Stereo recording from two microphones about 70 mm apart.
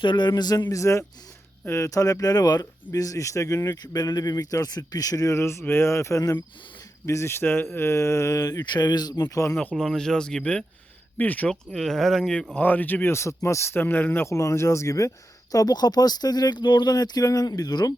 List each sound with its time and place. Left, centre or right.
0.2 s speech: left
0.7 s speech: left
5.3 s speech: left
9.3 s speech: left
9.7 s speech: centre
11.2 s speech: left
11.4 s speech: centre
12.5 s speech: left
13.1 s speech: left
14.3 s speech: left
15.5 s speech: left